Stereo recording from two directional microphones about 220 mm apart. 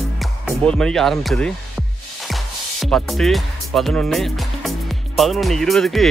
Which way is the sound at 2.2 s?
Centre (ahead or behind).